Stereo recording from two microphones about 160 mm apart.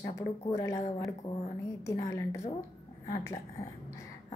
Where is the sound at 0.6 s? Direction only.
20° left (ahead or behind).